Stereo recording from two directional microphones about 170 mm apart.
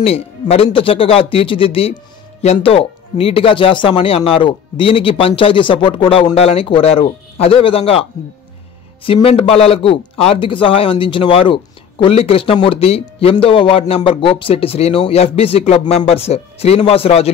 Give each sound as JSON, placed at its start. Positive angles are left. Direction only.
{"t": 0.0, "sound": "speech", "side_deg": 35}